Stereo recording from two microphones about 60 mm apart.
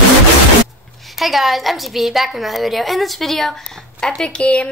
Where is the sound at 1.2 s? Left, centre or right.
Centre.